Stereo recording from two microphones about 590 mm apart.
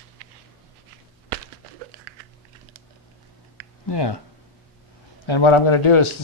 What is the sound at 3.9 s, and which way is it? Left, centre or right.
Speech, left.